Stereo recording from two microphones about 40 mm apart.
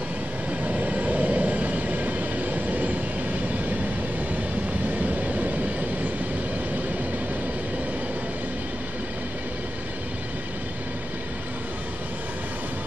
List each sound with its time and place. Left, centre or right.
0.7 s train: right
4.9 s train: right